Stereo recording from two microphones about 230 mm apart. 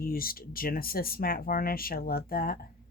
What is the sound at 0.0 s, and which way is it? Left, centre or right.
Speech, left.